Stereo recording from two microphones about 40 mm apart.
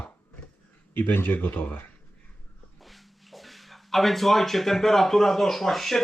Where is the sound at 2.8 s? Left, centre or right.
Centre.